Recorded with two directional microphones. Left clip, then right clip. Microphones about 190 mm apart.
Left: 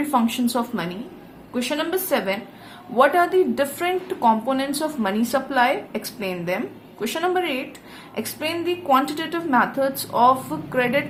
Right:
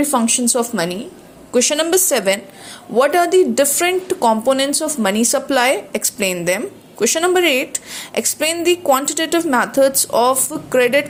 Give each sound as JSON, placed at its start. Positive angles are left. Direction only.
{"t": 0.0, "sound": "a woman's voice", "side_deg": -25}